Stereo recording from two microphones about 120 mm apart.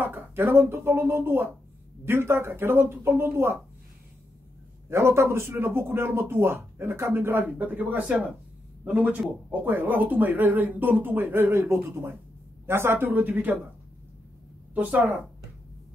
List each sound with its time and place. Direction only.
0.0 s speech: 15° right (ahead or behind)
4.8 s speech: 20° right (ahead or behind)
14.7 s speech: 15° right (ahead or behind)